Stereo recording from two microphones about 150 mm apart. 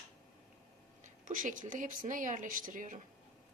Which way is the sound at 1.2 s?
60° right (ahead or behind).